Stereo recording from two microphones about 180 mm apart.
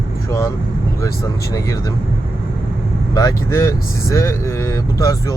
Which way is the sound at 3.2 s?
20° left (ahead or behind).